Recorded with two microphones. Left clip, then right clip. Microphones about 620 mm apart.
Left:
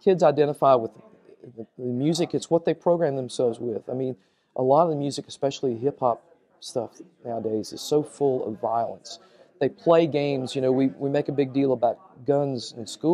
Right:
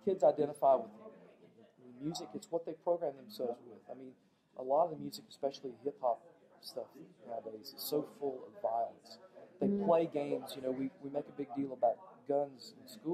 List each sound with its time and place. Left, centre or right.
0.0 s speech: left
2.0 s speech: left
4.6 s speech: left
7.2 s a man's voice: left